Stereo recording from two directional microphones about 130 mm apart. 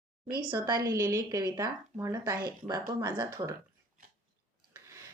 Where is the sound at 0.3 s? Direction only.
30° right (ahead or behind).